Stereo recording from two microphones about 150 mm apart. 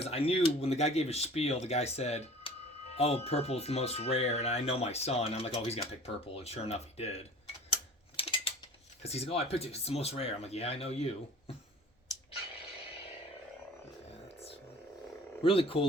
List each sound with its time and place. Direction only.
0.0 s speech: 40° left (ahead or behind)
8.1 s cutlery: 40° left (ahead or behind)
9.0 s speech: 45° left (ahead or behind)
15.4 s speech: 40° left (ahead or behind)